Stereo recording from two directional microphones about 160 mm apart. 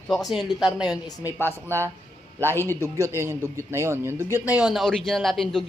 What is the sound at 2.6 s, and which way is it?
A man's voice, 15° right (ahead or behind).